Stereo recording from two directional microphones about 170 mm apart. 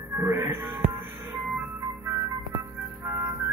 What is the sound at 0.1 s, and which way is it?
Music, 15° right (ahead or behind).